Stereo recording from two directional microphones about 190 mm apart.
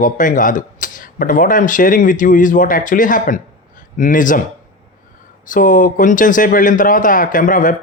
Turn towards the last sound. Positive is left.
turn(degrees=45)  # may be behind; listen again after turning